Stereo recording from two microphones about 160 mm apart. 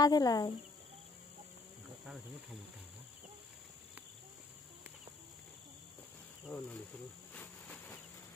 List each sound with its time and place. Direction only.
0.0 s speech: 25° left (ahead or behind)
6.4 s speech: 5° left (ahead or behind)
7.3 s insect: 10° left (ahead or behind)